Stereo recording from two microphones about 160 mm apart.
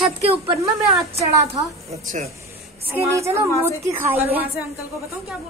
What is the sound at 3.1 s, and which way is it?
A woman's voice, 15° right (ahead or behind).